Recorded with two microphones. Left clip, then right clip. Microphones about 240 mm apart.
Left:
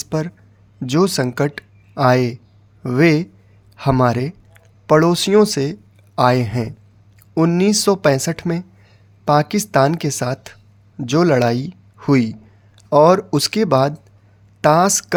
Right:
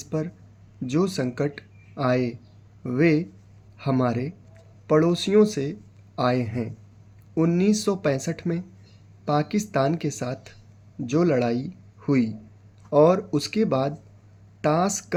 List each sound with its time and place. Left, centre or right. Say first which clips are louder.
0.0 s speech: left 7 dB; left